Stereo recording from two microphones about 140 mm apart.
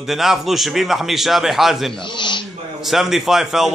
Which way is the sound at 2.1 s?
35° left (ahead or behind).